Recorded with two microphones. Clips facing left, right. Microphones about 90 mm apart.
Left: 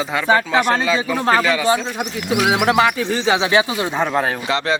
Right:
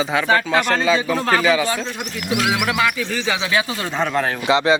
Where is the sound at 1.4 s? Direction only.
5° right (ahead or behind).